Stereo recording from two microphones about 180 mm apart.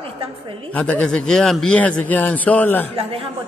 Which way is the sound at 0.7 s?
5° left (ahead or behind).